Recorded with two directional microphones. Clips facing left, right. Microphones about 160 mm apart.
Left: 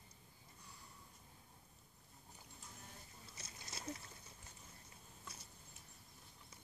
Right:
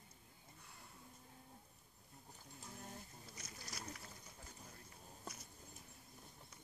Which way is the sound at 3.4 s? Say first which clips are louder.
Right 1 dB; 25° left (ahead or behind).